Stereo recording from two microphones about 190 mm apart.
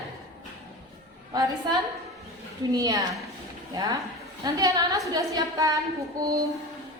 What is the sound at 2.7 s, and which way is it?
A woman's voice, 20° right (ahead or behind).